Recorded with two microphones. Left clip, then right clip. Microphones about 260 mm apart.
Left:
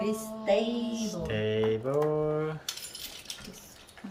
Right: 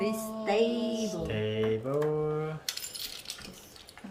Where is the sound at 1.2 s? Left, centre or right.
Centre.